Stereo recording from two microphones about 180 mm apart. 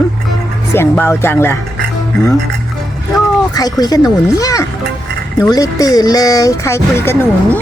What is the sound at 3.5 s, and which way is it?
Speech, 20° left (ahead or behind).